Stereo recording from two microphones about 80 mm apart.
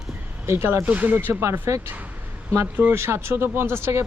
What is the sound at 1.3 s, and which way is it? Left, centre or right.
Speech, right.